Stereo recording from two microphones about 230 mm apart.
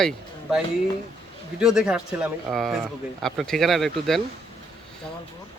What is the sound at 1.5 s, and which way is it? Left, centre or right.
Speech, centre.